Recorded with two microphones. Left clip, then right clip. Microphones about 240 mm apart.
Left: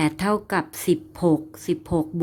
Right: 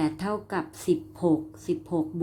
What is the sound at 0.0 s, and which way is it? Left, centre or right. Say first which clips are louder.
Speech: left 6 dB; left.